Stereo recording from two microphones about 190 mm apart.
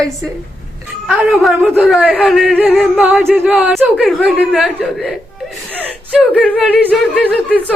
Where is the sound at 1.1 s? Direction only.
Centre (ahead or behind).